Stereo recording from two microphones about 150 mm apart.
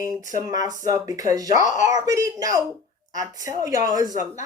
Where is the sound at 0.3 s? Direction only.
25° right (ahead or behind).